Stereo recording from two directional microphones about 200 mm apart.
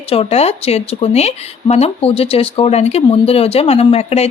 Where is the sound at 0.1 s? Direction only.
30° left (ahead or behind).